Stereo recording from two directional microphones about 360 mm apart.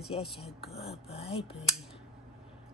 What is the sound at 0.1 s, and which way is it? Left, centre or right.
Speech, centre.